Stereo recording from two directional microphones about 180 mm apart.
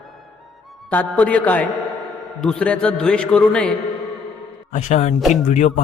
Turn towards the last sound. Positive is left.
turn(degrees=40)  # may be behind; listen again after turning